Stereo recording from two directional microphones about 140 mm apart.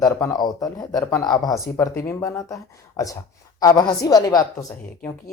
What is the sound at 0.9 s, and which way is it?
Speech, 10° left (ahead or behind).